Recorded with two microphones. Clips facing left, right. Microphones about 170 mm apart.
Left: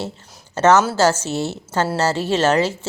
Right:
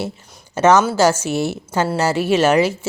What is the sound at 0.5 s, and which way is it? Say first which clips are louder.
A woman's voice: right 1 dB; 10° right (ahead or behind).